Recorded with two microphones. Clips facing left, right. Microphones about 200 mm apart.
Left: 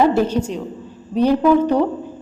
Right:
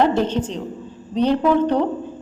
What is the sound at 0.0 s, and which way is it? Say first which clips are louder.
A woman's voice: left 2 dB; 10° left (ahead or behind).